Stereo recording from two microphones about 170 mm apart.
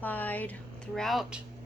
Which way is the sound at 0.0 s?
10° left (ahead or behind).